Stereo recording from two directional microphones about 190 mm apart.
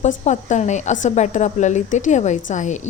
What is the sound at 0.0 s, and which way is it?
A woman's voice, 40° left (ahead or behind).